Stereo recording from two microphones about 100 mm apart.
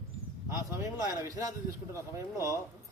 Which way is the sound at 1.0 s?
40° left (ahead or behind).